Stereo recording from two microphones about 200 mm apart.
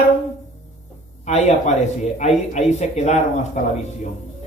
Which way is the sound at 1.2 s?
35° left (ahead or behind).